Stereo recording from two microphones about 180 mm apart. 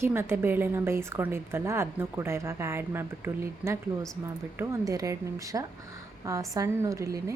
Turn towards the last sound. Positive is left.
turn(degrees=-15)  # may be behind; listen again after turning